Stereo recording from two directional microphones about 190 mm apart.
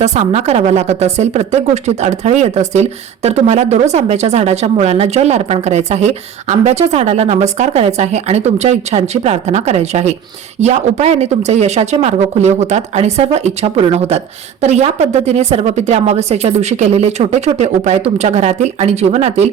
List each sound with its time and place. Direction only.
0.0 s a woman's voice: 35° right (ahead or behind)